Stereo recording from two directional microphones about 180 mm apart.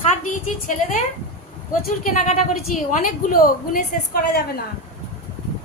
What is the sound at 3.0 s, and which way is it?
A woman's voice, 55° left (ahead or behind).